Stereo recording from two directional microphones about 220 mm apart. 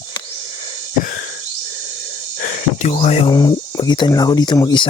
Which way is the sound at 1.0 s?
45° left (ahead or behind).